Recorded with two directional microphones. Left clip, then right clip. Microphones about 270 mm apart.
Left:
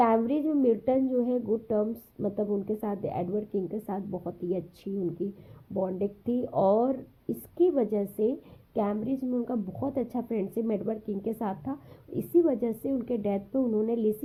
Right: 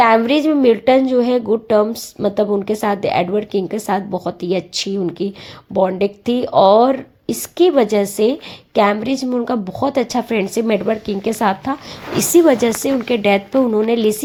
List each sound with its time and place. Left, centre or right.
0.0 s a woman's voice: centre
1.5 s a woman's voice: right
1.7 s a woman's voice: centre
4.1 s a woman's voice: right
5.8 s a woman's voice: centre
6.3 s speech: right
6.7 s a woman's voice: centre